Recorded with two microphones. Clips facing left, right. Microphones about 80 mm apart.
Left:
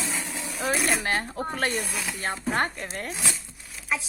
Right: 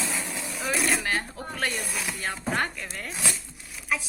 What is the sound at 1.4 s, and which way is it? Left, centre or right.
Speech, left.